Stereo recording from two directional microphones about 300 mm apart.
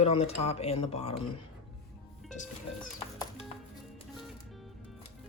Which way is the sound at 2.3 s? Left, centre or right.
Left.